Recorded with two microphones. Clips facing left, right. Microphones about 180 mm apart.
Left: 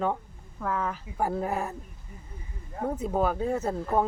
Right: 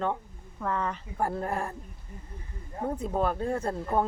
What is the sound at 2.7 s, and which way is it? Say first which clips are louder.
Speech: left 2 dB; 5° left (ahead or behind).